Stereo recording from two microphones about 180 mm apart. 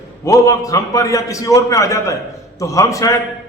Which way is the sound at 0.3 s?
20° left (ahead or behind).